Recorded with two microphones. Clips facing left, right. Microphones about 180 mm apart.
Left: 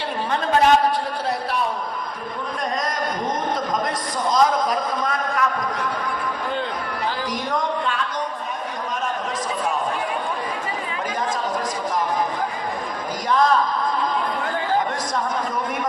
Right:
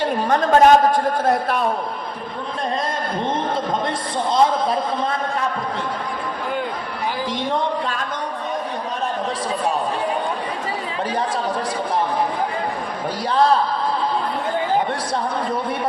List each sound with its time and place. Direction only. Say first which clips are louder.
0.3 s a man's voice: right 4 dB; 45° right (ahead or behind)
4.3 s a man's voice: right 1 dB; 30° right (ahead or behind)
7.5 s a sound: left 1 dB; 40° right (ahead or behind)
13.2 s a man's voice: right 1 dB; 30° right (ahead or behind)